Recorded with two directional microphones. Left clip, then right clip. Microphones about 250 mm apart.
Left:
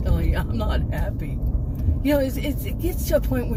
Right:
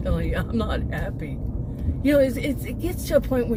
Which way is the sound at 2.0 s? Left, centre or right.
Right.